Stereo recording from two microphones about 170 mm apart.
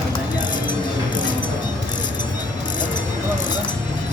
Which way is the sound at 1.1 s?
50° left (ahead or behind).